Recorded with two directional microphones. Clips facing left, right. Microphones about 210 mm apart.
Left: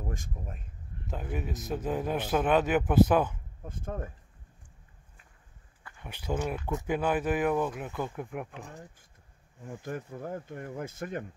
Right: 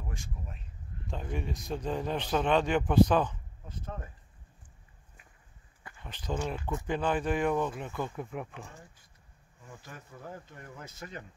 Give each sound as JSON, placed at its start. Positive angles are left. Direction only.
{"t": 1.0, "sound": "speech", "side_deg": 5}
{"t": 3.6, "sound": "speech", "side_deg": 50}
{"t": 6.0, "sound": "speech", "side_deg": 10}
{"t": 8.5, "sound": "speech", "side_deg": 15}
{"t": 9.8, "sound": "speech", "side_deg": 50}